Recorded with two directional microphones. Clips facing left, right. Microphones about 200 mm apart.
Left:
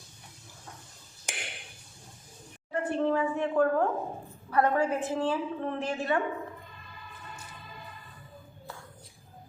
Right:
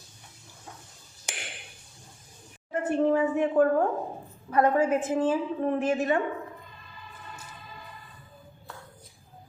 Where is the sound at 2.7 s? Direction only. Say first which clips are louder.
Right 4 dB; 20° right (ahead or behind).